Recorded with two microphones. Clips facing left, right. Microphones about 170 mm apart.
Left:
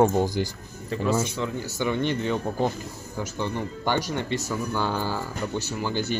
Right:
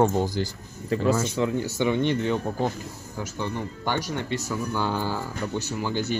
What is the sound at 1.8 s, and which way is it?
Speech, 20° right (ahead or behind).